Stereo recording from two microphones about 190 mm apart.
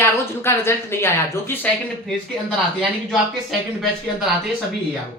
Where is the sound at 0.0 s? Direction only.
15° left (ahead or behind).